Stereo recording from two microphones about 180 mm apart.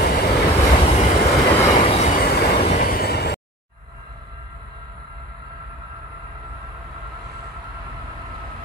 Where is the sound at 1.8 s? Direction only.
35° left (ahead or behind).